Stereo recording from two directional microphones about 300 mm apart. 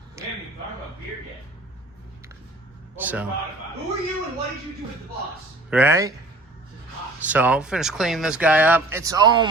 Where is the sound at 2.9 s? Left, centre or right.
Centre.